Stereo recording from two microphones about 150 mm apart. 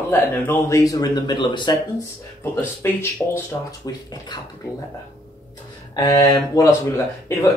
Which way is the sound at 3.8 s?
25° left (ahead or behind).